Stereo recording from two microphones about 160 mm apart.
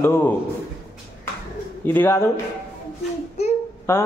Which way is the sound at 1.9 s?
15° left (ahead or behind).